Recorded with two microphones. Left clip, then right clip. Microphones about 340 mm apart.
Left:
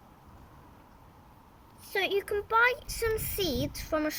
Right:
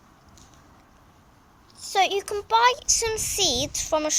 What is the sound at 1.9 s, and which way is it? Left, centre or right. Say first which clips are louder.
A child's voice: right 7 dB; centre.